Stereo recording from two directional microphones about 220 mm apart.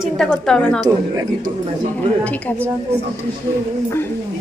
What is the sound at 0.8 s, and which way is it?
Speech, 20° right (ahead or behind).